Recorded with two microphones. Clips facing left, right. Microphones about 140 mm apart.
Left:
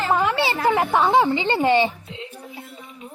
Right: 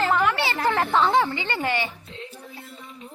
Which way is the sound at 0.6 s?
10° left (ahead or behind).